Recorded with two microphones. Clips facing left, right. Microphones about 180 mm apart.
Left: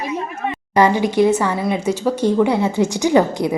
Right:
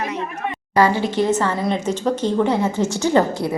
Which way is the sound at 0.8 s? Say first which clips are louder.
Left 3 dB; 15° left (ahead or behind).